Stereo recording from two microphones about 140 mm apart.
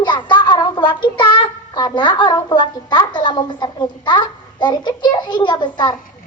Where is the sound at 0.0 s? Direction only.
35° left (ahead or behind).